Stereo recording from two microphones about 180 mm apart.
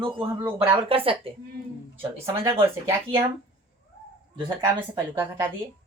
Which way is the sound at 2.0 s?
15° right (ahead or behind).